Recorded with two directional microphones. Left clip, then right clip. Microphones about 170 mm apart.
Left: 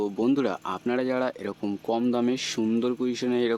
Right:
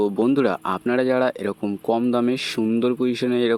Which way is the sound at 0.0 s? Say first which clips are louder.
Right 6 dB; 25° right (ahead or behind).